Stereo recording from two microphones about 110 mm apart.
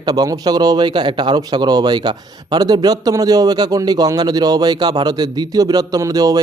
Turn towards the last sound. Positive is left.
turn(degrees=-35)  # may be behind; listen again after turning